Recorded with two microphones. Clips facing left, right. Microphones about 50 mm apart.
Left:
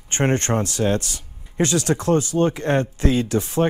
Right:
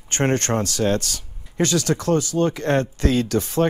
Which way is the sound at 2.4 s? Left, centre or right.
Centre.